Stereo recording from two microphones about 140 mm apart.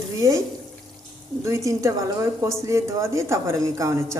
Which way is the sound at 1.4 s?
20° right (ahead or behind).